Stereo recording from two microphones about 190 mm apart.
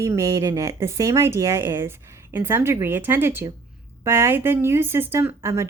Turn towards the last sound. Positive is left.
turn(degrees=-15)  # may be behind; listen again after turning